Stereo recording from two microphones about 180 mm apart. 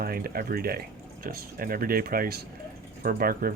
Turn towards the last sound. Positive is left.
turn(degrees=-55)  # may be behind; listen again after turning